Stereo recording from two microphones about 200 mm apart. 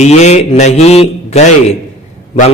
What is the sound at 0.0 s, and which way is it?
A man's voice, 35° left (ahead or behind).